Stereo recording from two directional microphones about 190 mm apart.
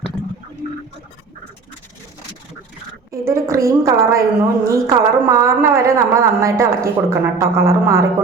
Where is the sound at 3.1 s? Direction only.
15° right (ahead or behind).